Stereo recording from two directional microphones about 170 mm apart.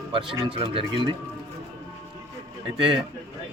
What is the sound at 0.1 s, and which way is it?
Speech, 30° right (ahead or behind).